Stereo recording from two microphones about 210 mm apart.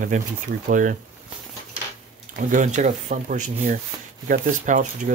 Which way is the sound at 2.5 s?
35° right (ahead or behind).